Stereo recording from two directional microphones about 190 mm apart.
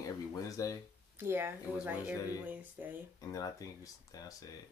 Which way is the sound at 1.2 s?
10° right (ahead or behind).